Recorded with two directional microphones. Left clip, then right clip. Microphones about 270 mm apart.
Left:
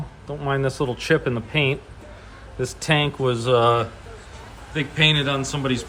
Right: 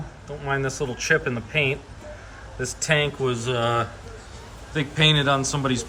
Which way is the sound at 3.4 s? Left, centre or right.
Centre.